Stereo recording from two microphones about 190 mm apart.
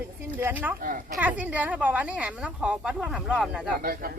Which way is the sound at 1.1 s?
10° right (ahead or behind).